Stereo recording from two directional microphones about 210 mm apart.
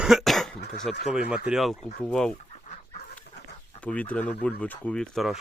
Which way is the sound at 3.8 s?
5° left (ahead or behind).